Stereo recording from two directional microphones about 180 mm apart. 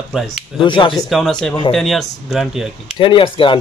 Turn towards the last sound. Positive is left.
turn(degrees=30)  # may be behind; listen again after turning